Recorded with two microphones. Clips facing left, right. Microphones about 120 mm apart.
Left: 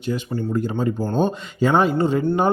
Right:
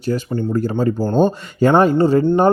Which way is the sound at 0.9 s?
35° right (ahead or behind).